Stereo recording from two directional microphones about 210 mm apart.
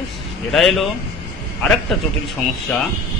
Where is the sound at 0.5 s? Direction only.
Centre (ahead or behind).